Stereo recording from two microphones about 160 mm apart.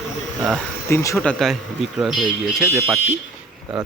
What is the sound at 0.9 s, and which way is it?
Speech, 15° left (ahead or behind).